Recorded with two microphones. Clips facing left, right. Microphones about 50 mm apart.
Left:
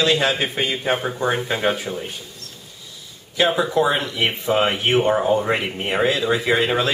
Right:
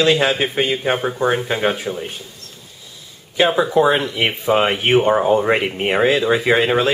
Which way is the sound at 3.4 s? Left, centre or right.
Centre.